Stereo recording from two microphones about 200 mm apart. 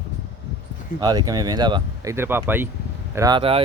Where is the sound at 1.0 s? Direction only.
20° right (ahead or behind).